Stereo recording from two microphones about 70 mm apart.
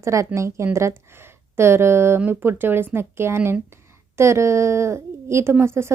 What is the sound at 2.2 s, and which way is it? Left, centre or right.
A woman's voice, right.